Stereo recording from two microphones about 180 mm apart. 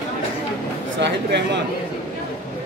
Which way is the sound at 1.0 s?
75° right (ahead or behind).